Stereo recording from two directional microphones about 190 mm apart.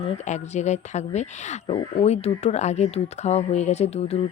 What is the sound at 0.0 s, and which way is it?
Speech, 35° left (ahead or behind).